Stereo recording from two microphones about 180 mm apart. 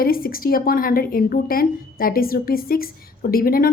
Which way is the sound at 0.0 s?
55° left (ahead or behind).